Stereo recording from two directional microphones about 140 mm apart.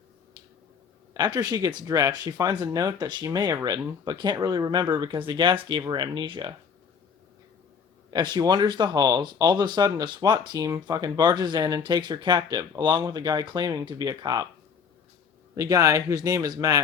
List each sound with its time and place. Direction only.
1.1 s speech: 30° right (ahead or behind)
8.1 s speech: 30° right (ahead or behind)
15.5 s speech: 25° right (ahead or behind)